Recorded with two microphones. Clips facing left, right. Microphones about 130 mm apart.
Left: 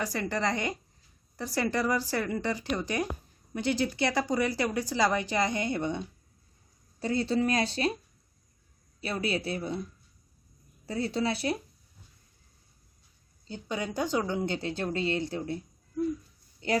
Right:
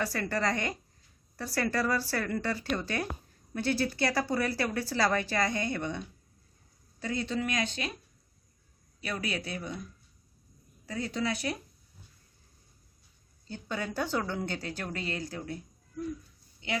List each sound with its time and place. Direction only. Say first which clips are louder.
0.0 s speech: even; 20° left (ahead or behind); by 7.9 s 35° left (ahead or behind)
9.0 s speech: left 4 dB; 30° left (ahead or behind)
10.8 s speech: left 3 dB; 30° left (ahead or behind)
13.5 s speech: left 2 dB; 15° left (ahead or behind)